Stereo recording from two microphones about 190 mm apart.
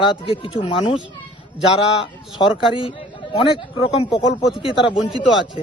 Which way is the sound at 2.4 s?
25° left (ahead or behind).